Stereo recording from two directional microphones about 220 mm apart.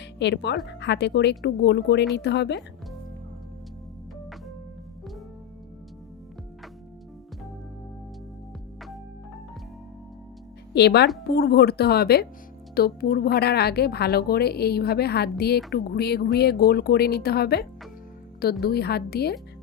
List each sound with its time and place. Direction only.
0.0 s a woman's voice: 50° left (ahead or behind)
10.8 s a woman's voice: 50° left (ahead or behind)